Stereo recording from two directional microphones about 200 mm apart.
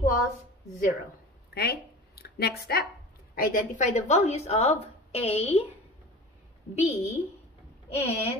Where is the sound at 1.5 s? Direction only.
50° left (ahead or behind).